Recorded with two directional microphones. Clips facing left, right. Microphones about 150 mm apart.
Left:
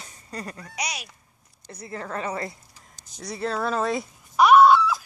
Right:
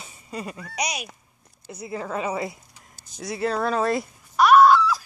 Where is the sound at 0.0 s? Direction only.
5° right (ahead or behind).